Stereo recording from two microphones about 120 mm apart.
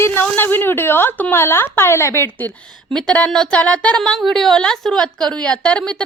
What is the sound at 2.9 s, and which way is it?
A woman's voice, 5° left (ahead or behind).